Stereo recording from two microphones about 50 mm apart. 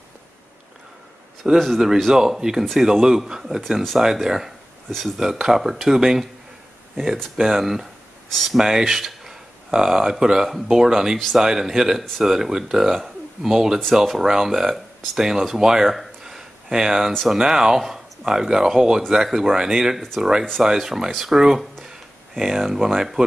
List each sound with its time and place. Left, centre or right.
1.5 s a man's voice: centre
2.0 s speech: centre
5.2 s speech: centre
7.3 s speech: centre
8.3 s speech: centre
8.5 s speech: centre